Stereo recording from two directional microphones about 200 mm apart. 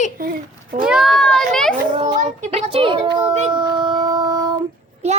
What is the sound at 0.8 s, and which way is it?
Speech, centre (ahead or behind).